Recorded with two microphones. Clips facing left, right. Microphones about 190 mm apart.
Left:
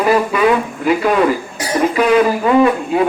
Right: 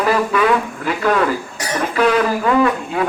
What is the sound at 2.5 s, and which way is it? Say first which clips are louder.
Speech: left 3 dB; 20° left (ahead or behind).